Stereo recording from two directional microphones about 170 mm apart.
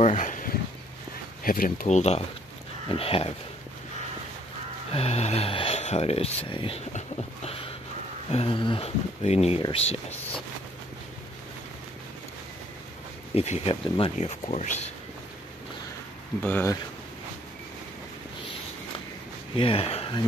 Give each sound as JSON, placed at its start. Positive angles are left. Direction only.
{"t": 0.0, "sound": "a sound", "side_deg": 45}
{"t": 1.4, "sound": "speech", "side_deg": 55}
{"t": 4.9, "sound": "speech", "side_deg": 35}
{"t": 6.9, "sound": "dog", "side_deg": 40}
{"t": 8.3, "sound": "speech", "side_deg": 35}
{"t": 13.3, "sound": "speech", "side_deg": 35}
{"t": 16.4, "sound": "speech", "side_deg": 10}
{"t": 19.5, "sound": "speech", "side_deg": 30}